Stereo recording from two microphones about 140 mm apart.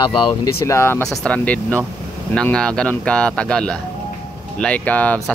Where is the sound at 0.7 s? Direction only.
20° left (ahead or behind).